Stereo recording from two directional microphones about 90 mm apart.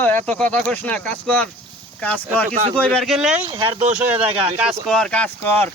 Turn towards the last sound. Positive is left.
turn(degrees=20)  # may be behind; listen again after turning